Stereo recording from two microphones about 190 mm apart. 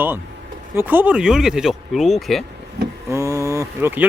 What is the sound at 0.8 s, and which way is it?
Speech, 10° right (ahead or behind).